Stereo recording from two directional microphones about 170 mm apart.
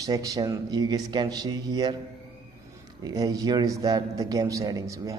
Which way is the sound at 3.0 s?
20° right (ahead or behind).